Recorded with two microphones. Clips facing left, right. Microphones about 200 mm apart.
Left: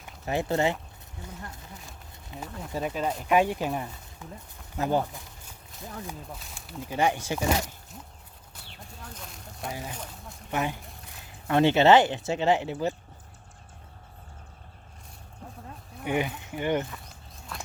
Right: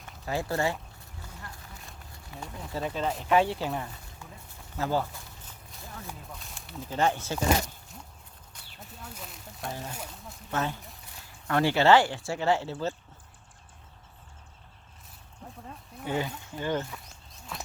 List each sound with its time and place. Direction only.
0.3 s speech: 20° left (ahead or behind)
2.3 s speech: 20° left (ahead or behind)
5.5 s clip-clop: 15° left (ahead or behind)
6.4 s a sound: centre (ahead or behind)
6.8 s speech: 15° left (ahead or behind)
8.8 s speech: 5° right (ahead or behind); by 12.9 s 15° left (ahead or behind)
16.0 s speech: 20° left (ahead or behind)